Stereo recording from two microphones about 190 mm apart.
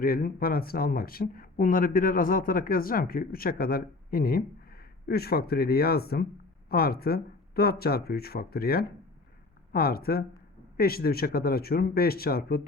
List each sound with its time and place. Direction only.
0.0 s speech: 50° left (ahead or behind)